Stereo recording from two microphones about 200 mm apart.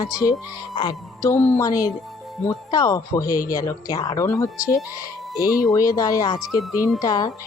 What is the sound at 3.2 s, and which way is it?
Speech, 45° left (ahead or behind).